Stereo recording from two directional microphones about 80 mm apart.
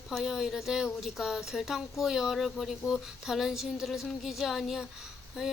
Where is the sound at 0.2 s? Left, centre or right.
Centre.